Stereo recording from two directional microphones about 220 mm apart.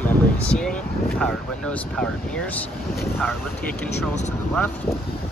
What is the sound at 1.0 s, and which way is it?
Speech, 5° left (ahead or behind).